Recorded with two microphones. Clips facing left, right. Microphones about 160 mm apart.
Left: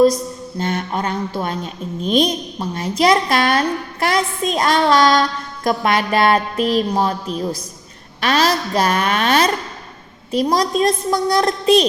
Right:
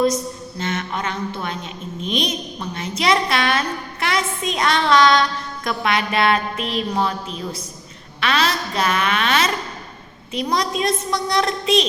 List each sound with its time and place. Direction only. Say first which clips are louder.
0.6 s a woman's voice: left 4 dB; 35° left (ahead or behind)